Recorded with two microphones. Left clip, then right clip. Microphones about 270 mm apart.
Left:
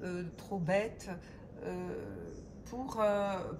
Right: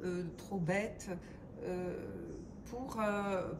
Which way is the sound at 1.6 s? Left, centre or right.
Left.